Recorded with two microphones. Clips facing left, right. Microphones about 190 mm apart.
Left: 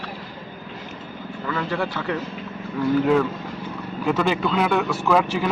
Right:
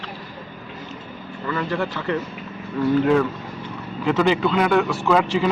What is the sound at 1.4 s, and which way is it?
Speech, centre (ahead or behind).